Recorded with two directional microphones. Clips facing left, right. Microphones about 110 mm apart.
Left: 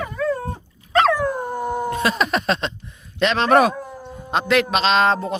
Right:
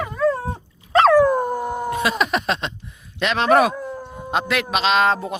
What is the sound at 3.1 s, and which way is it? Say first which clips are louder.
A man's voice: left 1 dB; 10° right (ahead or behind).